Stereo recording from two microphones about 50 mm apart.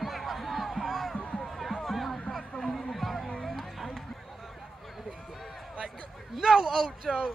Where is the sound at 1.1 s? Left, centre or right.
Left.